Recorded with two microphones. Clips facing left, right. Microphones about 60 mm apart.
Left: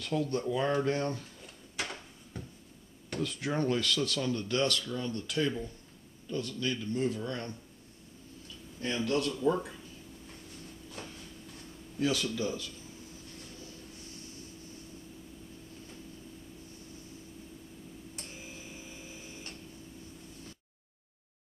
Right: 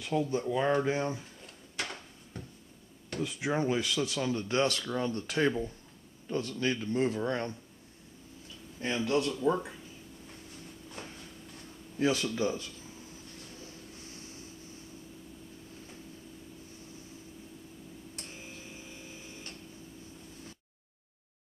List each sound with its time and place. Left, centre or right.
0.0 s speech: centre
1.4 s drawer open or close: centre
3.2 s speech: centre; by 5.2 s right
6.3 s speech: right
8.8 s a man's voice: centre
12.0 s a man's voice: right
14.0 s vehicle: right